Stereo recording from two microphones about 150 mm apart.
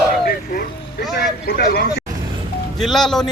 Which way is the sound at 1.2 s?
90° left.